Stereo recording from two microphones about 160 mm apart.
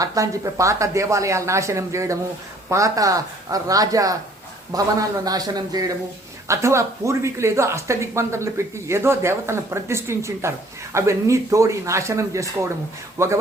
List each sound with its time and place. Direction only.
0.0 s speech: 20° right (ahead or behind)